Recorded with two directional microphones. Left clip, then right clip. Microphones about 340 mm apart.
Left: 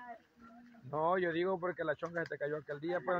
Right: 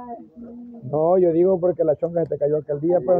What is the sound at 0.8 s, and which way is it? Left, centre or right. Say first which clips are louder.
Speech: right 14 dB; left.